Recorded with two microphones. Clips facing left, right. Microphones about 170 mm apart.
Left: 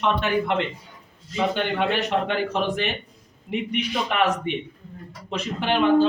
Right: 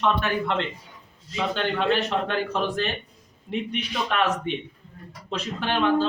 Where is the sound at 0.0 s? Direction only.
15° left (ahead or behind).